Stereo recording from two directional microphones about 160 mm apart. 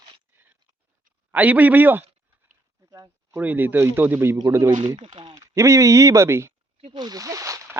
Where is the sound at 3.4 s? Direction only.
10° right (ahead or behind).